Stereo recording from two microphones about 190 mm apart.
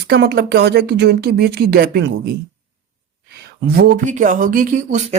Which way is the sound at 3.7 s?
50° right (ahead or behind).